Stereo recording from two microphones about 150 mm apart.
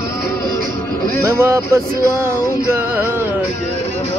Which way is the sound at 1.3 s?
20° right (ahead or behind).